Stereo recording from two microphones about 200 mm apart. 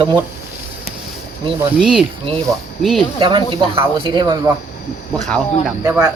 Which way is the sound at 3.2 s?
25° right (ahead or behind).